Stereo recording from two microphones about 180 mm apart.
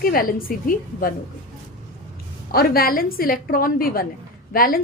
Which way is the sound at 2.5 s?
55° left (ahead or behind).